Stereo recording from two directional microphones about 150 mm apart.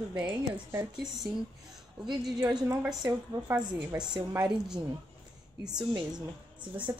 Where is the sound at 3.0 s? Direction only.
25° right (ahead or behind).